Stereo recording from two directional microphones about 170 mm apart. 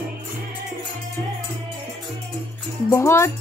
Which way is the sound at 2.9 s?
15° left (ahead or behind).